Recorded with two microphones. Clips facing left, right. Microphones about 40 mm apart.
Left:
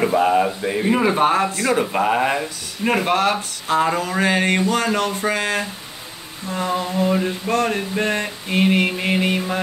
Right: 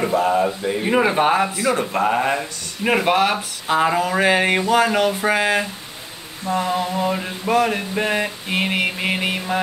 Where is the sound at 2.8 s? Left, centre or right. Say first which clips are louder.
Right 1 dB; centre.